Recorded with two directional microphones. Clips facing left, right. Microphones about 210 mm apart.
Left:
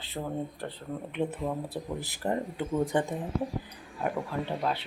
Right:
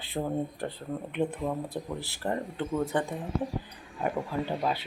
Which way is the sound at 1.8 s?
15° left (ahead or behind).